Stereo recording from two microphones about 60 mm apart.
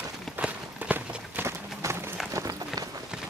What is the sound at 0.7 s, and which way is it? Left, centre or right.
Walk, right.